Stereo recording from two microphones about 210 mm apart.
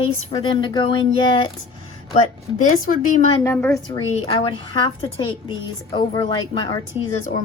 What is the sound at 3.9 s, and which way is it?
A woman's voice, 30° left (ahead or behind).